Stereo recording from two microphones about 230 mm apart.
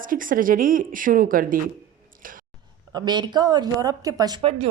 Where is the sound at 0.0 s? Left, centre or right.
Right.